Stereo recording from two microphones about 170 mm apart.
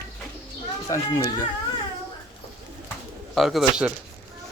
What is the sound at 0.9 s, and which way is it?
Speech, 20° left (ahead or behind).